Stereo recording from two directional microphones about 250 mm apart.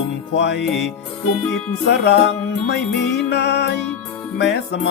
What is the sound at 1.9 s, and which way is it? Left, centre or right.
Music, left.